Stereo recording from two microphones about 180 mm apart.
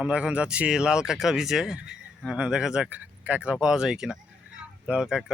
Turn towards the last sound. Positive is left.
turn(degrees=-5)  # may be behind; listen again after turning